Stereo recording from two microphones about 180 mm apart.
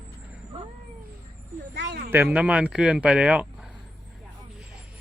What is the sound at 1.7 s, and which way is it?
Speech, 65° right (ahead or behind).